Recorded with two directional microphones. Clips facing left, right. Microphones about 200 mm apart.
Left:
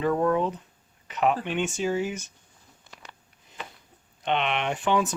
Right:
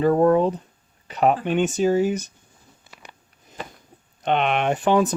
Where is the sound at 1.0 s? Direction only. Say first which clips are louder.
Right 5 dB; 35° right (ahead or behind).